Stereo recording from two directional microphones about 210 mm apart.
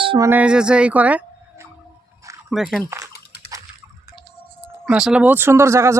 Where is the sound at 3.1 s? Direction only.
50° left (ahead or behind).